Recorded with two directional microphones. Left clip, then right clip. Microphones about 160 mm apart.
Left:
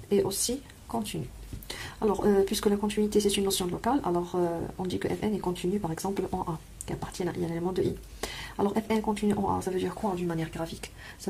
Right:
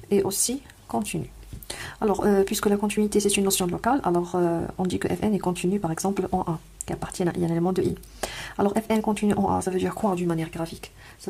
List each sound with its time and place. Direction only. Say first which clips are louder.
0.1 s speech: right 3 dB; 35° right (ahead or behind)